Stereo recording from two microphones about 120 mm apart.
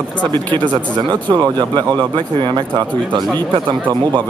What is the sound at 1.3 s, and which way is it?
Speech, 35° right (ahead or behind).